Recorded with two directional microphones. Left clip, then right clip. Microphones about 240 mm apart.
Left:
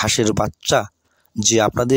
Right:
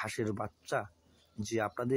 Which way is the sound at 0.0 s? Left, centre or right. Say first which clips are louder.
Left 18 dB; left.